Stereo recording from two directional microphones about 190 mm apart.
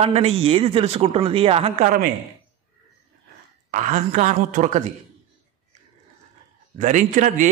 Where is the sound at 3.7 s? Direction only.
40° right (ahead or behind).